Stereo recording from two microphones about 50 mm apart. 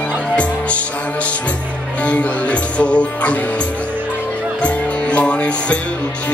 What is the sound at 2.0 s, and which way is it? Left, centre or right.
Music, left.